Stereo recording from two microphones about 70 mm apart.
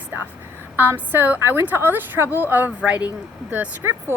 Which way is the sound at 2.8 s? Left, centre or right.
Centre.